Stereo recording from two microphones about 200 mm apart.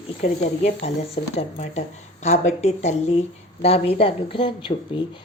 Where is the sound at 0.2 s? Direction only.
35° left (ahead or behind).